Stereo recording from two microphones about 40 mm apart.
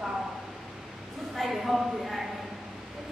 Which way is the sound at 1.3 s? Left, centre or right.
Centre.